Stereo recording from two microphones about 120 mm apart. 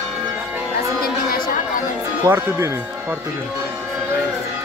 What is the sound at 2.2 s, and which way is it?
Speech, 20° right (ahead or behind).